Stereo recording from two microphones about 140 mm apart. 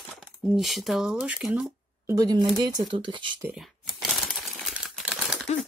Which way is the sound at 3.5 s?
Centre (ahead or behind).